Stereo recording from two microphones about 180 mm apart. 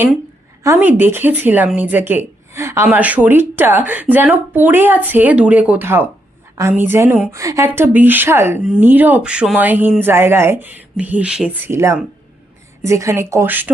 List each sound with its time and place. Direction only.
0.6 s speech: 10° right (ahead or behind)